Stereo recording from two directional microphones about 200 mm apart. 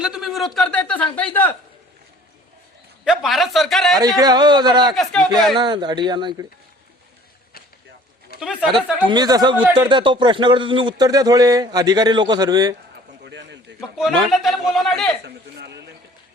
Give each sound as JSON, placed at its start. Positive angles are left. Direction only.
{"t": 0.0, "sound": "a man's voice", "side_deg": -5}
{"t": 3.0, "sound": "a man's voice", "side_deg": 0}
{"t": 4.2, "sound": "speech", "side_deg": -20}
{"t": 4.9, "sound": "a man's voice", "side_deg": 5}
{"t": 5.5, "sound": "speech", "side_deg": -20}
{"t": 8.4, "sound": "a man's voice", "side_deg": -5}
{"t": 9.0, "sound": "speech", "side_deg": -20}
{"t": 13.2, "sound": "a sound", "side_deg": -60}
{"t": 14.3, "sound": "a man's voice", "side_deg": 0}
{"t": 15.2, "sound": "speech", "side_deg": -55}